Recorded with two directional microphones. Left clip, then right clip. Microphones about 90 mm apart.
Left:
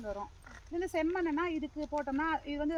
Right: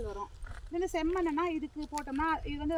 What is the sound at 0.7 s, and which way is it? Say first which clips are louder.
Speech: right 1 dB; 25° left (ahead or behind).